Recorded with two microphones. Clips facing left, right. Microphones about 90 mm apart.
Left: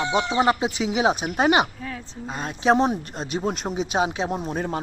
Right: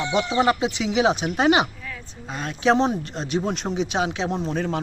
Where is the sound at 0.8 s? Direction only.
5° left (ahead or behind).